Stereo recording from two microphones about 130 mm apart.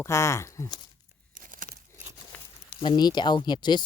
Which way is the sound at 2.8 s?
35° left (ahead or behind).